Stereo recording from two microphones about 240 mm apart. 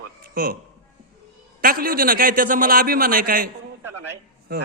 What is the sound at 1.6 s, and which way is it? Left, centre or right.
A man's voice, right.